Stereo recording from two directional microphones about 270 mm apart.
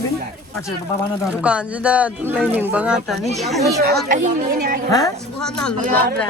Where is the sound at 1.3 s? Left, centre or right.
Centre.